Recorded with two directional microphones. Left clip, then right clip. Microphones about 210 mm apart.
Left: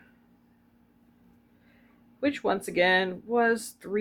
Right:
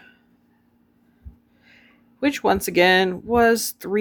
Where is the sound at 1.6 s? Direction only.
50° right (ahead or behind).